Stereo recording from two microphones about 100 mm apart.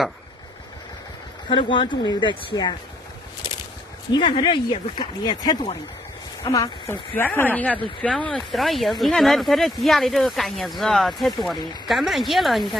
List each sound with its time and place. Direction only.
1.5 s speech: 55° left (ahead or behind)
4.1 s speech: 50° left (ahead or behind)
6.9 s speech: 20° left (ahead or behind); by 12.6 s centre (ahead or behind)